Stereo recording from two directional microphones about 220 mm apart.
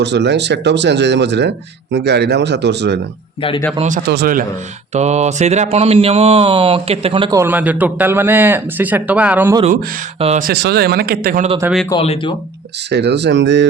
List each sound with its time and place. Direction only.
0.0 s speech: 50° right (ahead or behind)
3.8 s speech: 35° right (ahead or behind)
4.9 s a man's voice: 30° right (ahead or behind); by 9.6 s 10° right (ahead or behind)
10.2 s speech: 30° right (ahead or behind)
10.4 s speech: 45° right (ahead or behind)
11.6 s speech: centre (ahead or behind)
11.9 s speech: 25° left (ahead or behind)
12.9 s speech: 50° right (ahead or behind)